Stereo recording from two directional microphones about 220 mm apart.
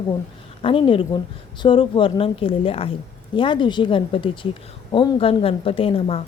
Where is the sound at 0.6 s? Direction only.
25° left (ahead or behind).